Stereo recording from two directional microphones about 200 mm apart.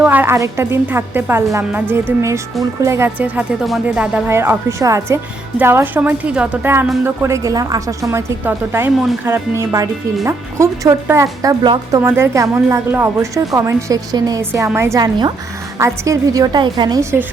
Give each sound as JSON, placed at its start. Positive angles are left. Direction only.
{"t": 0.0, "sound": "speech", "side_deg": -10}